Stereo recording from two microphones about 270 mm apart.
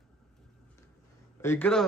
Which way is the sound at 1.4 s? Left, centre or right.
Centre.